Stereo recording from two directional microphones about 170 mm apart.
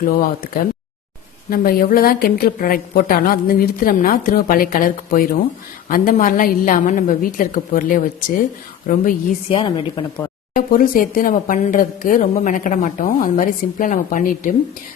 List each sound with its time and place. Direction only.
0.0 s a woman's voice: 60° left (ahead or behind)
9.5 s speech: 30° left (ahead or behind)
10.5 s speech: 55° left (ahead or behind)